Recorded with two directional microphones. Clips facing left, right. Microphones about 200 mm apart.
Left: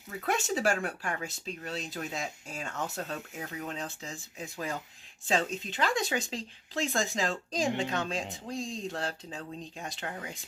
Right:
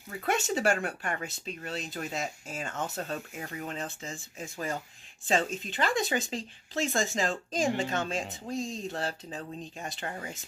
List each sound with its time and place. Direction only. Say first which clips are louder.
0.3 s speech: right 1 dB; centre (ahead or behind)